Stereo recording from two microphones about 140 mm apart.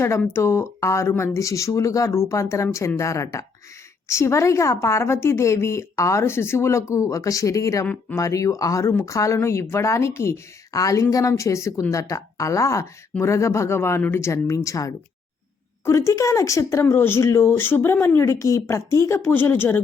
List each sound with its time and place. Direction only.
0.2 s speech: 15° left (ahead or behind)